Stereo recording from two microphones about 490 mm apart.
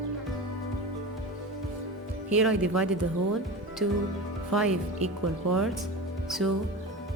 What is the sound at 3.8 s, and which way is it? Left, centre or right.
Speech, right.